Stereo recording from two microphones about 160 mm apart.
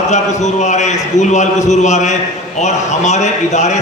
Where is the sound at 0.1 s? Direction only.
45° left (ahead or behind).